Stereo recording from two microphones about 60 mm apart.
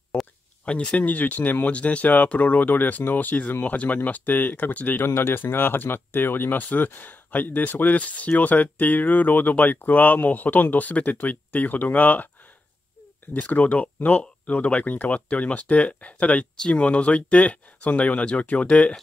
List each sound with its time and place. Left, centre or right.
0.1 s a sound: centre
0.7 s speech: centre
13.3 s speech: left